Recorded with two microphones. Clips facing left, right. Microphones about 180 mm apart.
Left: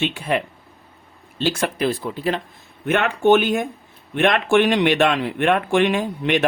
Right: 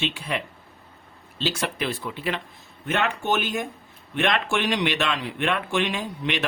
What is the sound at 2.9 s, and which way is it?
Speech, 60° left (ahead or behind).